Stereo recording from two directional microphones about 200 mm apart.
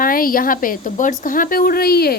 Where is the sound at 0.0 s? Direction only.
45° left (ahead or behind).